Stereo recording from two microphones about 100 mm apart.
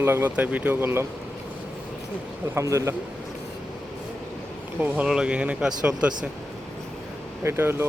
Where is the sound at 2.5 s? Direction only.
30° right (ahead or behind).